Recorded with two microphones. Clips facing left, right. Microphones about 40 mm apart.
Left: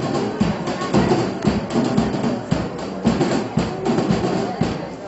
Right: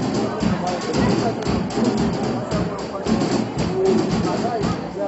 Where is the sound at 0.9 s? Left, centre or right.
Left.